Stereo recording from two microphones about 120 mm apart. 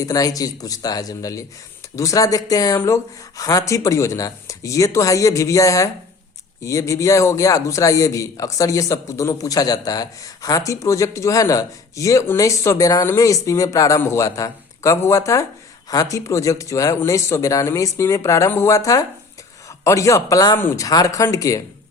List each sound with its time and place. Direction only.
0.0 s a man's voice: 30° left (ahead or behind)
20.6 s speech: 20° left (ahead or behind)
20.8 s a man's voice: 30° left (ahead or behind)